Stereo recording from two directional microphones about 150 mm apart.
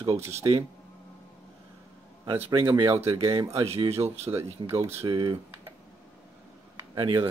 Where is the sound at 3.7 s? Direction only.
45° right (ahead or behind).